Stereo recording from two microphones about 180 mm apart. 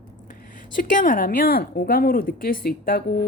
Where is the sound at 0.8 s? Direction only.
50° left (ahead or behind).